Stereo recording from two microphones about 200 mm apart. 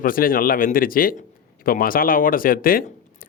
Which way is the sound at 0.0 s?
45° left (ahead or behind).